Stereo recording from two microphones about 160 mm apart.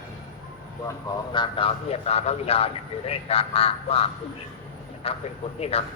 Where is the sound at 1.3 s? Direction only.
30° left (ahead or behind).